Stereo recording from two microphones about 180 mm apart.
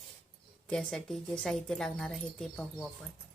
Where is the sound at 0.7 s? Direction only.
5° left (ahead or behind).